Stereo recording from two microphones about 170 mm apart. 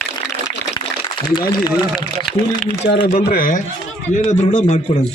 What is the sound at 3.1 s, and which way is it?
Speech, 40° left (ahead or behind).